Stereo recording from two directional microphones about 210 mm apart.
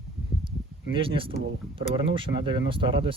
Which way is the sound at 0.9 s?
25° right (ahead or behind).